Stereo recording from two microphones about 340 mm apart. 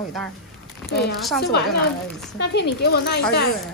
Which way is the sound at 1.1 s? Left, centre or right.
Centre.